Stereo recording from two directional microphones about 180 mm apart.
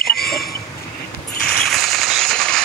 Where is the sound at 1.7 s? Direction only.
Centre (ahead or behind).